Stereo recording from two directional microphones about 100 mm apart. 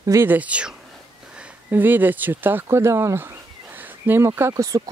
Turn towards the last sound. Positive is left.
turn(degrees=-25)  # may be behind; listen again after turning